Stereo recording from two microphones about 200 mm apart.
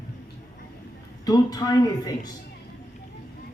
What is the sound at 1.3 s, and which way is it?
A man's voice, 20° left (ahead or behind).